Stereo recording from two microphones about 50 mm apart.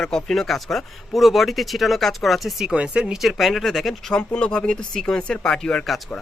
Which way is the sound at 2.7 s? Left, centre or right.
Right.